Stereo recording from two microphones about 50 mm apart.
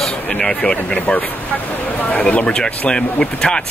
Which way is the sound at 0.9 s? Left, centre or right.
Left.